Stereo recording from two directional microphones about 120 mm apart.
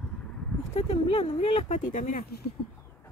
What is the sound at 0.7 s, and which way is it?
Speech, 55° left (ahead or behind).